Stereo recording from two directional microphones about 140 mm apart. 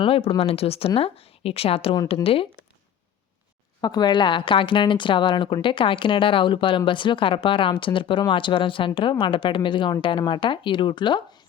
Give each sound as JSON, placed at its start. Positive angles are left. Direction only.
{"t": 0.0, "sound": "a woman's voice", "side_deg": 40}
{"t": 3.8, "sound": "a woman's voice", "side_deg": 30}